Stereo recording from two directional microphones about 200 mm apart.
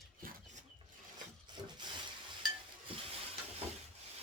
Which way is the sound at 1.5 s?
20° right (ahead or behind).